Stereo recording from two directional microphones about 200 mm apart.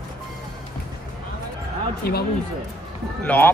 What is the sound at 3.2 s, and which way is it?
Speech, 10° left (ahead or behind).